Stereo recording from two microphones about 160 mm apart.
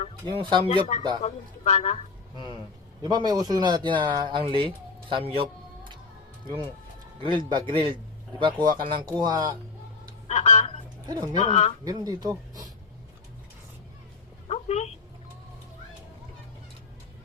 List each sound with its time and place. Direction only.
0.3 s speech: 35° right (ahead or behind)
0.7 s a man's voice: 50° left (ahead or behind)
2.3 s speech: 30° left (ahead or behind)
3.0 s speech: 25° right (ahead or behind)
5.0 s a sound: 35° right (ahead or behind)
7.2 s speech: 30° right (ahead or behind)
10.2 s speech: 45° left (ahead or behind)
11.0 s speech: 25° right (ahead or behind)
11.3 s a man's voice: 45° left (ahead or behind)
11.9 s speech: 25° right (ahead or behind)
14.4 s a sound: 40° left (ahead or behind)